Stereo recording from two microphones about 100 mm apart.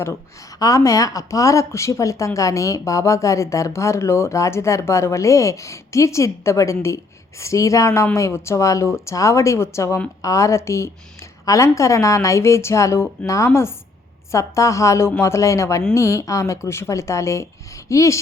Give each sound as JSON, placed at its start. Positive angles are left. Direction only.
{"t": 0.6, "sound": "speech", "side_deg": 35}